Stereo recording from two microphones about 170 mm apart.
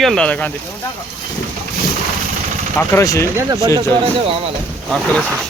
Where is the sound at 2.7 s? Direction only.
15° left (ahead or behind).